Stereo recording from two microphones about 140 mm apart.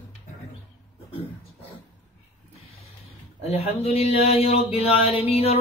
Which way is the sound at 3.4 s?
45° left (ahead or behind).